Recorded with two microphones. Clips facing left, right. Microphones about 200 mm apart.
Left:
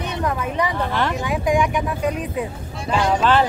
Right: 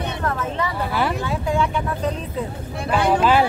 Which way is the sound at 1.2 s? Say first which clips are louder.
Left 3 dB; 15° left (ahead or behind).